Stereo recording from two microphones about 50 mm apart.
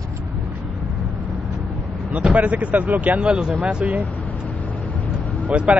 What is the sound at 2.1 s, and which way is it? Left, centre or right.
Speech, right.